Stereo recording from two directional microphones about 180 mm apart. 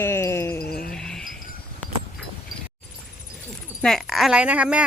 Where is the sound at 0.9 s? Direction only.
5° left (ahead or behind).